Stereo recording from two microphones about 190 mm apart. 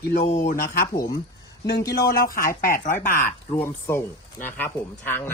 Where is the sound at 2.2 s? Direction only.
50° left (ahead or behind).